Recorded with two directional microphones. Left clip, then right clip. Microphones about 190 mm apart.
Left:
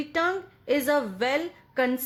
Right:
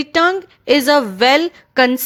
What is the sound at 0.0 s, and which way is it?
A woman's voice, 40° right (ahead or behind).